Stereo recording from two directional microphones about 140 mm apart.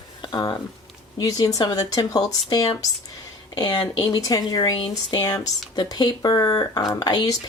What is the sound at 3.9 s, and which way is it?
Speech, 25° left (ahead or behind).